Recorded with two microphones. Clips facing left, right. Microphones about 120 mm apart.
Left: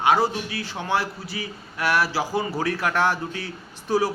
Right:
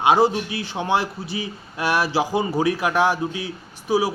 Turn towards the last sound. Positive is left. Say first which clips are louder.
# right 2 dB
turn(degrees=-10)  # may be behind; listen again after turning